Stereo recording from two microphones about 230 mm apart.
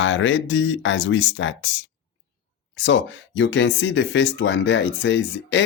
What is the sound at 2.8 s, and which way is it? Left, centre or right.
Speech, left.